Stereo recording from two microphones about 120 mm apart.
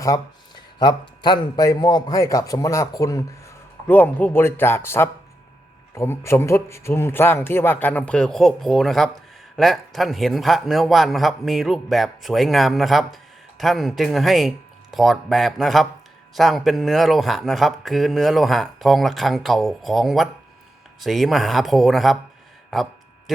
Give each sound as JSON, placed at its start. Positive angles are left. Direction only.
{"t": 0.0, "sound": "speech", "side_deg": 30}
{"t": 3.8, "sound": "a man's voice", "side_deg": 15}
{"t": 22.7, "sound": "a sound", "side_deg": 0}